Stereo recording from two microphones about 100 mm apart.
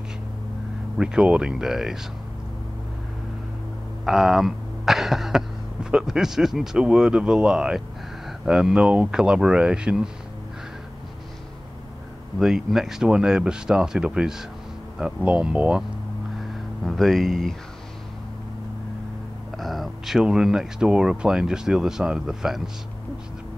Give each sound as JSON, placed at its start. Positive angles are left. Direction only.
{"t": 0.9, "sound": "speech", "side_deg": -10}
{"t": 4.0, "sound": "speech", "side_deg": -5}
{"t": 12.4, "sound": "speech", "side_deg": -5}
{"t": 16.8, "sound": "speech", "side_deg": 0}
{"t": 19.5, "sound": "speech", "side_deg": 0}